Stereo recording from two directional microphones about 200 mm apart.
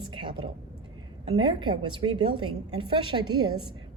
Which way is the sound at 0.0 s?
25° right (ahead or behind).